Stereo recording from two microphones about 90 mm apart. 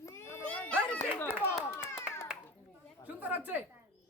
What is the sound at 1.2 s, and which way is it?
Clapping, 25° left (ahead or behind).